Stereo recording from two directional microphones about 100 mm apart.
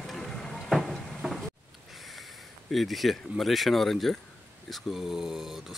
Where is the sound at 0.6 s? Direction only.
Centre (ahead or behind).